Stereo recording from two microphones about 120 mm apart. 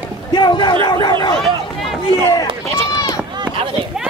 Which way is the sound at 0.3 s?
40° left (ahead or behind).